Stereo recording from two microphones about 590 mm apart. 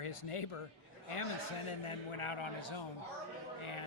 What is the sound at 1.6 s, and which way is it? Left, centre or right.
A man's voice, left.